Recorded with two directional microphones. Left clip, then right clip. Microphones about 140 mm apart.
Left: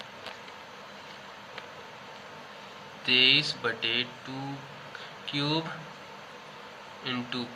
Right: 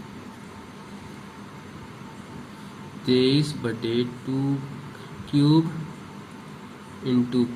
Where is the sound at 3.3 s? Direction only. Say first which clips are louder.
Left 1 dB; 10° right (ahead or behind).